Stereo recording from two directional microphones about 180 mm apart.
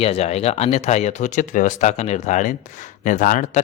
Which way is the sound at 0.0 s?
35° left (ahead or behind).